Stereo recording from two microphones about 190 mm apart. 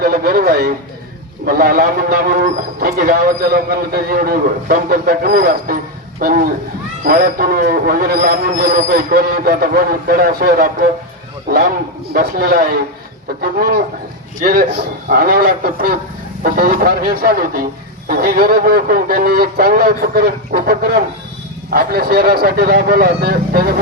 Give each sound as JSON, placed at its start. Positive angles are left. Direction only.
{"t": 0.0, "sound": "a sound", "side_deg": -55}
{"t": 1.5, "sound": "a man's voice", "side_deg": -50}
{"t": 12.1, "sound": "a man's voice", "side_deg": -55}